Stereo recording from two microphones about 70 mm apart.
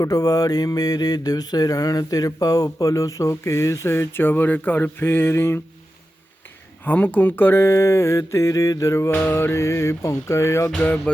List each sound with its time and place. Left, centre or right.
0.0 s mantra: left
4.1 s speech: left
6.8 s a sound: left
9.0 s music: left
10.8 s speech: centre